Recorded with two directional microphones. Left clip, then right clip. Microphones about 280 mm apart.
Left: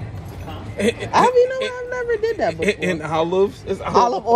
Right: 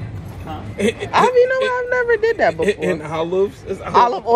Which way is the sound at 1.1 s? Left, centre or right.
Centre.